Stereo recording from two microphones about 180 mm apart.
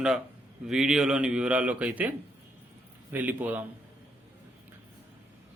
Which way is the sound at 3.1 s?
10° right (ahead or behind).